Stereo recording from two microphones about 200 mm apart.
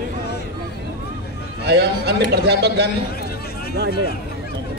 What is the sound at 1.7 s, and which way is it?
A man's voice, 55° right (ahead or behind).